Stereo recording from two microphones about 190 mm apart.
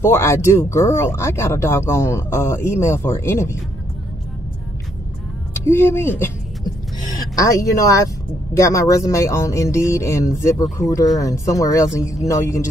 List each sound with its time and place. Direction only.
0.0 s speech: 15° left (ahead or behind)
5.5 s speech: 15° left (ahead or behind)
7.3 s speech: 15° left (ahead or behind)